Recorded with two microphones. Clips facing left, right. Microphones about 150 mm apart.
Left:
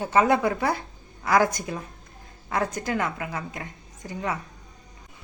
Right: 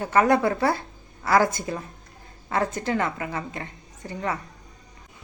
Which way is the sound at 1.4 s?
15° left (ahead or behind).